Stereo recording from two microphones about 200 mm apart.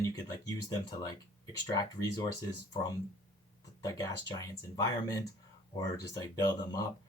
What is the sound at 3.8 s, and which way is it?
Speech, 20° left (ahead or behind).